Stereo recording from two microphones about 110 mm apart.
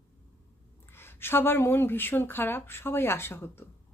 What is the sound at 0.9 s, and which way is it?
Speech, 20° left (ahead or behind).